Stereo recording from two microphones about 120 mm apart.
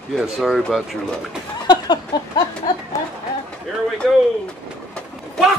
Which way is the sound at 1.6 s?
35° left (ahead or behind).